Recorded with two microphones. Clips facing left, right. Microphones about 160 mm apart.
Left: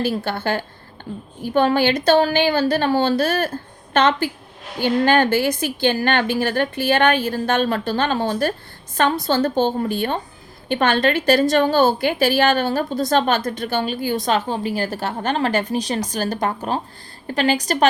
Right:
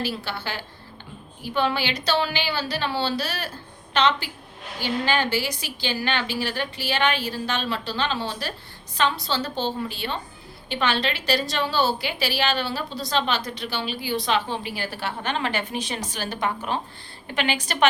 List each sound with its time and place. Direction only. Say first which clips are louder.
0.0 s a woman's voice: left 7 dB; 50° left (ahead or behind)